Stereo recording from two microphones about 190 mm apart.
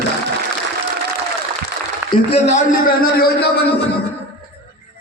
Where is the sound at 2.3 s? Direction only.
45° left (ahead or behind).